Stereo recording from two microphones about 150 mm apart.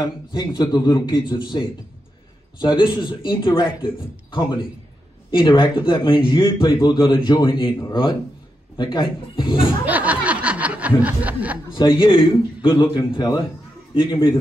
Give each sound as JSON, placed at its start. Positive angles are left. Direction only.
{"t": 0.0, "sound": "a man's voice", "side_deg": 30}
{"t": 5.4, "sound": "a man's voice", "side_deg": 30}
{"t": 9.8, "sound": "snicker", "side_deg": -10}
{"t": 11.7, "sound": "a man's voice", "side_deg": 35}